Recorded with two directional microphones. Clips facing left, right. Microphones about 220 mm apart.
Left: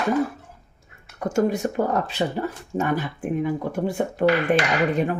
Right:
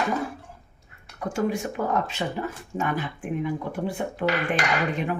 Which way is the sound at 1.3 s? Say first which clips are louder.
Left 5 dB; 40° left (ahead or behind).